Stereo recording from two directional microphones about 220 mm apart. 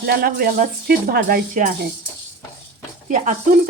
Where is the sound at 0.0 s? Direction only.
45° right (ahead or behind).